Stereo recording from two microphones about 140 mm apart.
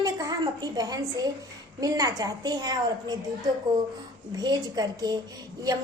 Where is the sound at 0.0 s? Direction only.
25° right (ahead or behind).